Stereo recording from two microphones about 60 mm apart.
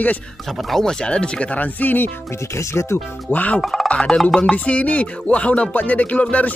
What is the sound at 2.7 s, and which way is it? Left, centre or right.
Speech, left.